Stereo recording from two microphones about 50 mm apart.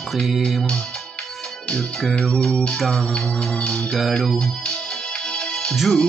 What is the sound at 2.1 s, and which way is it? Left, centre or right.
Music, centre.